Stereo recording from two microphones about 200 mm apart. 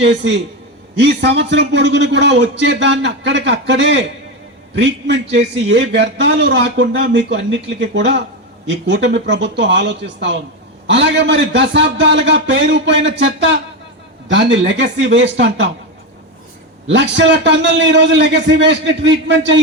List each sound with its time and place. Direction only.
0.0 s a man's voice: 65° right (ahead or behind)
16.8 s a man's voice: 60° right (ahead or behind)